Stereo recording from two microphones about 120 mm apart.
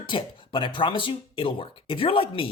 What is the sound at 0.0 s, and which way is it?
Speech, 45° left (ahead or behind).